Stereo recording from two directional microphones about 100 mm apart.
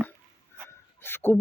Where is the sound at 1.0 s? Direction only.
20° left (ahead or behind).